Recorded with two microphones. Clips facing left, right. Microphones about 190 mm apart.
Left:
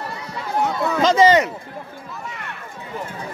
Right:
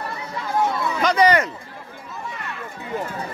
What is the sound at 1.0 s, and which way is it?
Speech, 25° left (ahead or behind).